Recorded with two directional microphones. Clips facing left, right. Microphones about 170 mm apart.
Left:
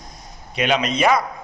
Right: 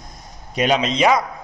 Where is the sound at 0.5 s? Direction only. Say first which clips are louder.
Right 2 dB; 40° right (ahead or behind).